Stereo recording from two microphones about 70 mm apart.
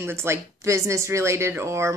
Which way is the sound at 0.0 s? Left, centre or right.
Right.